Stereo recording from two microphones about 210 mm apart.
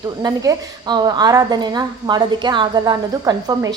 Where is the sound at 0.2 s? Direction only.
20° right (ahead or behind).